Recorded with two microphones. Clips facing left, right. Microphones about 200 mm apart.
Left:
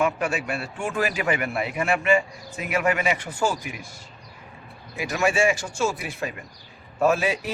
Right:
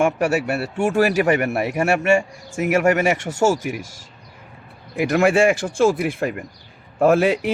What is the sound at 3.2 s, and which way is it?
Speech, 75° right (ahead or behind).